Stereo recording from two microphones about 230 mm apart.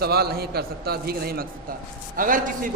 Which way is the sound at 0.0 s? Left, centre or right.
Right.